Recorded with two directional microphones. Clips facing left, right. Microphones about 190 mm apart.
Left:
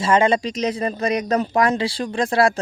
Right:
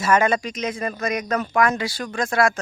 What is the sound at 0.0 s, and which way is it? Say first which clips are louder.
Speech: left 2 dB; 25° left (ahead or behind).